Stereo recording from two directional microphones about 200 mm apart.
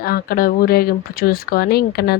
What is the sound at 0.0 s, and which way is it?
Speech, 50° left (ahead or behind).